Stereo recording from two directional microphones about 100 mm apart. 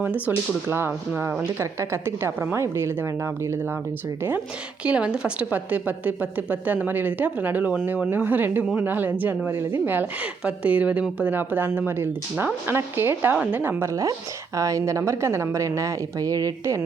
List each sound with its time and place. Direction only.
0.0 s a woman's voice: 20° right (ahead or behind)
4.8 s a woman's voice: 10° right (ahead or behind); by 16.8 s 35° right (ahead or behind)